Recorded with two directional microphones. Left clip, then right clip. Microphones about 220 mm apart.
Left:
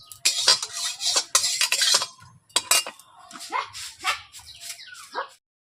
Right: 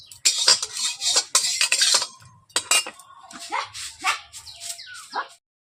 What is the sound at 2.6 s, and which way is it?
Cutlery, centre (ahead or behind).